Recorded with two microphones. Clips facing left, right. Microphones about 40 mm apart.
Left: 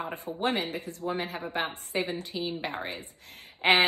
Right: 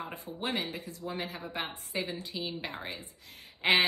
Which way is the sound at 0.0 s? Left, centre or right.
Left.